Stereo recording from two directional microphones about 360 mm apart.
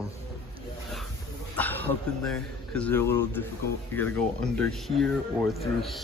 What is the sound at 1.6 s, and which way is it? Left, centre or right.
A man's voice, centre.